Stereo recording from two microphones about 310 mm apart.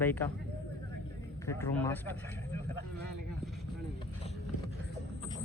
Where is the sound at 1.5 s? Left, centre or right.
Centre.